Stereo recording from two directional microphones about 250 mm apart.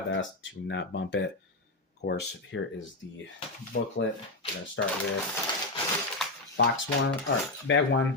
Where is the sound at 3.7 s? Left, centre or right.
Left.